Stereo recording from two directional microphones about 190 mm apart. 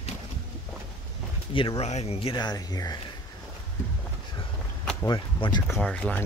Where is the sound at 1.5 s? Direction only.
25° left (ahead or behind).